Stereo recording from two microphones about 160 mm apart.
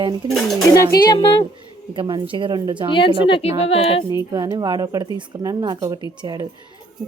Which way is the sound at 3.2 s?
35° left (ahead or behind).